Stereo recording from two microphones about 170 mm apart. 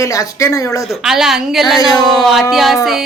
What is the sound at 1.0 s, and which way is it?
A woman's voice, centre (ahead or behind).